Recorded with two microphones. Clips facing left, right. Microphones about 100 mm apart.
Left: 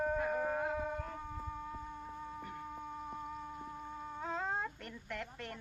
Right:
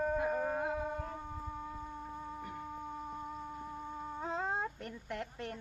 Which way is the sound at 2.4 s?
5° right (ahead or behind).